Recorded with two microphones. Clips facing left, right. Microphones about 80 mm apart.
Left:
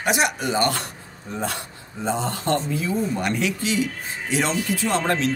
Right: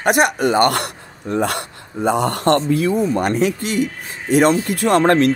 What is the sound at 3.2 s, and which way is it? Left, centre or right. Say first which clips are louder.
Speech: right 6 dB; right.